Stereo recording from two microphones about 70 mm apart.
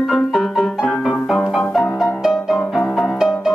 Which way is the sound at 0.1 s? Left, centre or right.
Centre.